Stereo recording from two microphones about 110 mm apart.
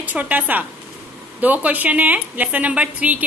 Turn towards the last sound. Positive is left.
turn(degrees=-15)  # may be behind; listen again after turning